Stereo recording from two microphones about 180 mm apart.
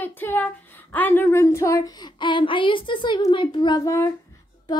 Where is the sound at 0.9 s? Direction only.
10° left (ahead or behind).